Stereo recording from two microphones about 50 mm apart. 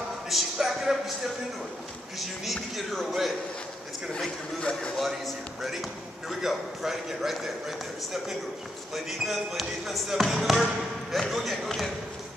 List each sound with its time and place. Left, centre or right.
0.3 s a man's voice: centre
4.6 s speech: left
5.2 s a man's voice: centre